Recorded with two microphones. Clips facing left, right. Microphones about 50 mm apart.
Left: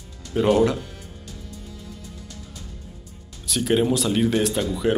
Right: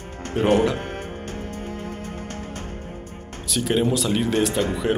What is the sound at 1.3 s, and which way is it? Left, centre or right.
Music, right.